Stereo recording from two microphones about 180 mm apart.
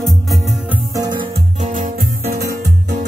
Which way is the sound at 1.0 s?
25° right (ahead or behind).